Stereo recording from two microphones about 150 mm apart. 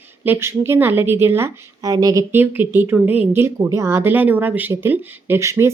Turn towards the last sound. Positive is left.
turn(degrees=-20)  # may be behind; listen again after turning